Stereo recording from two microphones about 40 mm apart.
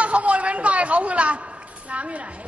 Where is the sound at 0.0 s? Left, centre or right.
Right.